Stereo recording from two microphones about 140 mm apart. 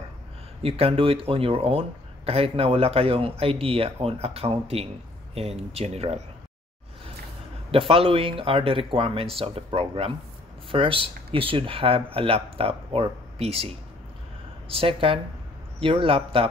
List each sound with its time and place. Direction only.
0.6 s speech: 45° right (ahead or behind)
7.7 s speech: 40° right (ahead or behind)